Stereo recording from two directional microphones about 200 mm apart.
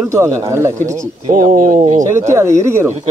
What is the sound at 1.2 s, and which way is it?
Speech, 40° right (ahead or behind).